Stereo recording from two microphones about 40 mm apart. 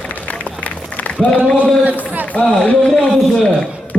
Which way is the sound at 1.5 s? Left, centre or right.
Right.